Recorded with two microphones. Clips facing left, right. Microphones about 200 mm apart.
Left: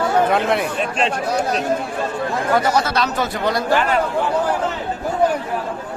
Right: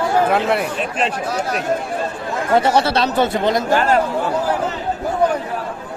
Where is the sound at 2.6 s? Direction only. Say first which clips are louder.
Right 5 dB; 30° right (ahead or behind).